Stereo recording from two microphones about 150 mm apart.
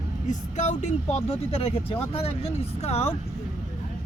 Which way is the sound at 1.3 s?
40° left (ahead or behind).